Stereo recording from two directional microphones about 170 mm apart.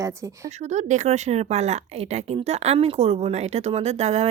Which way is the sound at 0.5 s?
40° right (ahead or behind).